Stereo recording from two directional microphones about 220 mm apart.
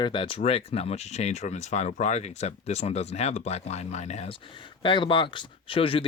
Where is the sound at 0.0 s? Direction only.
25° left (ahead or behind).